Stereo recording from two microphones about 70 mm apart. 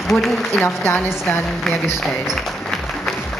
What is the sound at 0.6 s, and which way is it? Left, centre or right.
Speech, left.